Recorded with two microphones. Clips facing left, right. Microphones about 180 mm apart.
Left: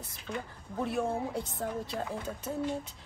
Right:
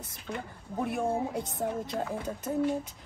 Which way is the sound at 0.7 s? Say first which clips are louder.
Right 2 dB; 15° right (ahead or behind).